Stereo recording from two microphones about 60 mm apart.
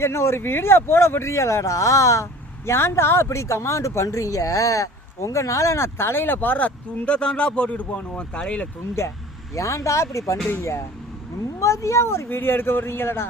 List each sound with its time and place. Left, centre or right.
0.0 s speech: left
2.6 s speech: left; by 8.6 s centre
9.6 s speech: left